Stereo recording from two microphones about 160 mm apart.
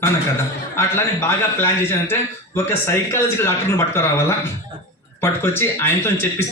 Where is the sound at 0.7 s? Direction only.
15° left (ahead or behind).